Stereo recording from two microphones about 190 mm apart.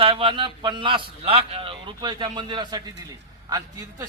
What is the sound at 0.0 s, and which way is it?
A man's voice, 25° right (ahead or behind).